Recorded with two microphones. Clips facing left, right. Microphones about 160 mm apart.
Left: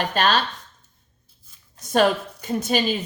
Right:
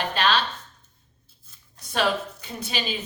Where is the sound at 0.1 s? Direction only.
45° left (ahead or behind).